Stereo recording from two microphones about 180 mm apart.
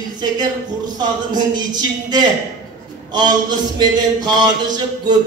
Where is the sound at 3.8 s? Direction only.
20° right (ahead or behind).